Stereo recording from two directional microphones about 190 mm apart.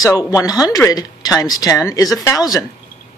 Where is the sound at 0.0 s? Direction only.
20° left (ahead or behind).